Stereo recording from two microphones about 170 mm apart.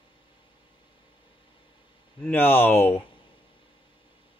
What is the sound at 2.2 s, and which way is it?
Speech, 10° left (ahead or behind).